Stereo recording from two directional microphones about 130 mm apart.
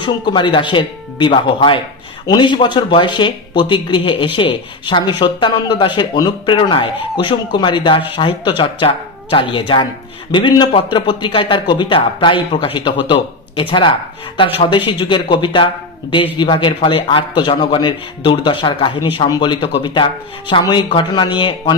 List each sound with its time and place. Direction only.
0.0 s speech: 35° left (ahead or behind)